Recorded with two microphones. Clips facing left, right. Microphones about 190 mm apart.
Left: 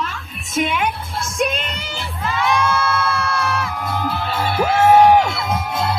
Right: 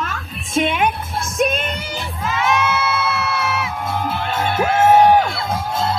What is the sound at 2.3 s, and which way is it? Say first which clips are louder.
Crowd: even; 5° right (ahead or behind).